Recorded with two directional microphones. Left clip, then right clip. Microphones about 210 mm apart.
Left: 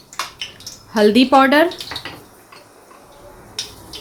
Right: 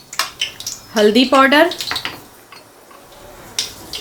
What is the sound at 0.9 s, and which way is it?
Speech, 15° left (ahead or behind).